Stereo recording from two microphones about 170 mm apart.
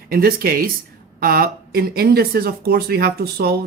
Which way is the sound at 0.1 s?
60° right (ahead or behind).